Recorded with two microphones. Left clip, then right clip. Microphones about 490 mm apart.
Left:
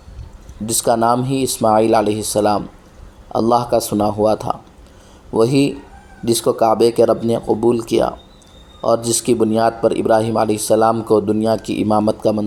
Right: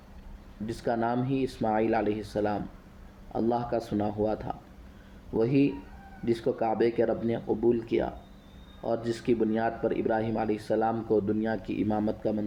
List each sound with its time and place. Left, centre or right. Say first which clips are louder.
0.6 s a man's voice: left 14 dB; right